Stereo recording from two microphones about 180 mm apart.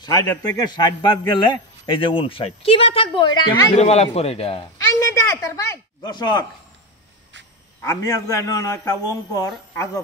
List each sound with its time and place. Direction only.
0.0 s speech: 25° left (ahead or behind)
3.7 s a man's voice: 35° left (ahead or behind)
4.7 s a woman's voice: 15° left (ahead or behind)
7.8 s a man's voice: 15° left (ahead or behind)